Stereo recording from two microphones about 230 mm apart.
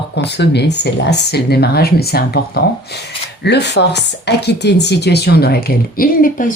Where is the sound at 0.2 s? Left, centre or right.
Left.